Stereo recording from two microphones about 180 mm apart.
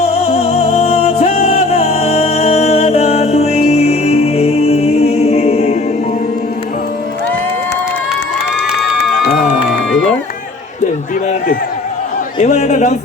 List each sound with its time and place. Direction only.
0.0 s music: 35° left (ahead or behind)
9.3 s music: centre (ahead or behind)
12.4 s a sound: 40° left (ahead or behind)